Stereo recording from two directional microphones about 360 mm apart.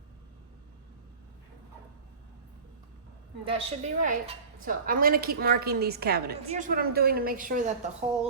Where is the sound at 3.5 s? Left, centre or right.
Centre.